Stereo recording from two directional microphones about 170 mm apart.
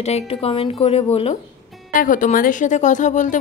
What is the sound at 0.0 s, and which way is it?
Speech, 35° left (ahead or behind).